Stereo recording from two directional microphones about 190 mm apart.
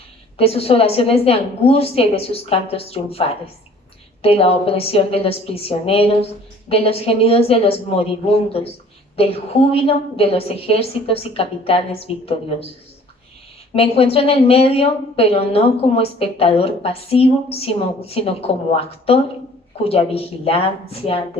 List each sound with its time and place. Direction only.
0.3 s a woman's voice: 30° left (ahead or behind)
9.1 s a woman's voice: 30° left (ahead or behind)
13.7 s a woman's voice: 30° left (ahead or behind)